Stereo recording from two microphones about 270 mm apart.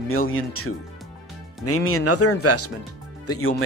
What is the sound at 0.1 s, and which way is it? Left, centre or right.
Speech, left.